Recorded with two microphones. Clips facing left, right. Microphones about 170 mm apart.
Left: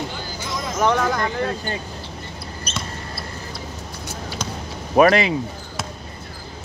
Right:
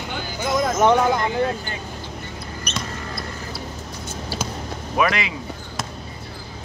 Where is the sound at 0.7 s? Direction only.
25° right (ahead or behind).